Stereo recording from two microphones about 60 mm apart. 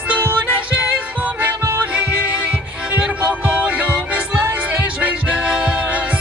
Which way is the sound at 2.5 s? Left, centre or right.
Right.